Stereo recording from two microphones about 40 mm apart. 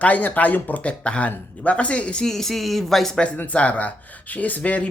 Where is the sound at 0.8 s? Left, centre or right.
Left.